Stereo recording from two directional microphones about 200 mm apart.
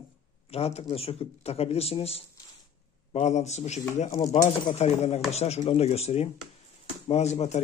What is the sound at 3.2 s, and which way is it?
A man's voice, 35° left (ahead or behind).